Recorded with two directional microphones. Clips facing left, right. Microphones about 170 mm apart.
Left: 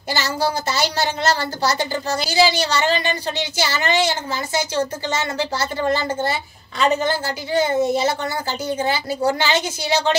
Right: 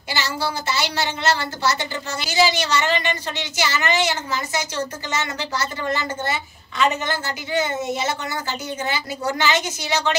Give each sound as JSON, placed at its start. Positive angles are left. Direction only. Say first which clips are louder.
{"t": 0.1, "sound": "a woman's voice", "louder": "left 4 dB", "side_deg": 40}